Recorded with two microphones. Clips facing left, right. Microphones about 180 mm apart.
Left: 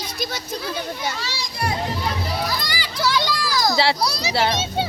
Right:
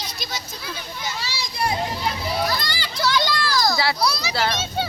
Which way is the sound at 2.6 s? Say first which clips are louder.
Left 1 dB; 10° left (ahead or behind).